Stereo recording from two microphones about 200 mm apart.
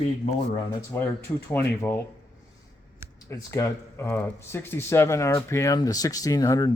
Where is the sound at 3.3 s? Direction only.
15° left (ahead or behind).